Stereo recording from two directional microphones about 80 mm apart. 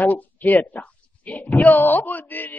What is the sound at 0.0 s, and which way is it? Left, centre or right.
Speech, left.